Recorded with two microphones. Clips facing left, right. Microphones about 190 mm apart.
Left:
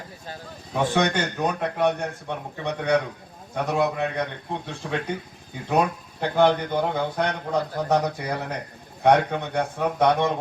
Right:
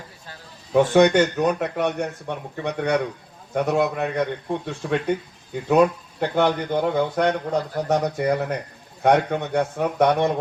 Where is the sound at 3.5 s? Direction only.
55° right (ahead or behind).